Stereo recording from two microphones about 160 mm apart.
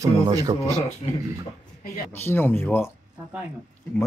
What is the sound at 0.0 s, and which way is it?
Speech, 25° right (ahead or behind).